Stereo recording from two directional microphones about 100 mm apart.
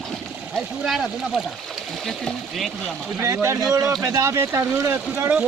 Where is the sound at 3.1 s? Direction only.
25° right (ahead or behind).